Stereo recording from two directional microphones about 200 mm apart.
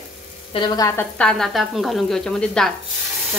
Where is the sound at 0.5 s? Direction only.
20° left (ahead or behind).